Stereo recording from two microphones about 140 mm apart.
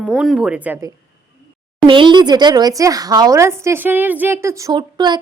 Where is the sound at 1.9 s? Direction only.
35° right (ahead or behind).